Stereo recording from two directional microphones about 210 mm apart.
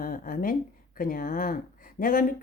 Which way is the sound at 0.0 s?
40° left (ahead or behind).